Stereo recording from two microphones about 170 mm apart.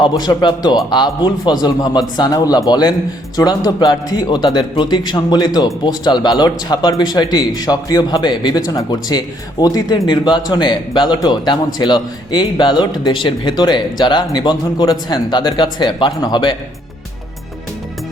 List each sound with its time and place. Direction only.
0.0 s a man's voice: 25° left (ahead or behind)